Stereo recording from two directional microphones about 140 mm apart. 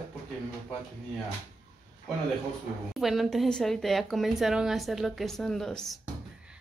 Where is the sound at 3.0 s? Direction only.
Centre (ahead or behind).